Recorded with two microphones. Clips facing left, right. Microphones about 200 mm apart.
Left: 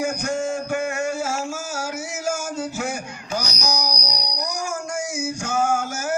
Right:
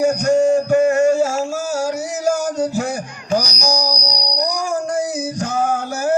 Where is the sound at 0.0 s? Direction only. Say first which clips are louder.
Right 10 dB; 40° right (ahead or behind).